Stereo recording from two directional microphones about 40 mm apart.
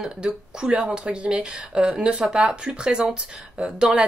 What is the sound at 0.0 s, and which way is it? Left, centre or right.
Speech, centre.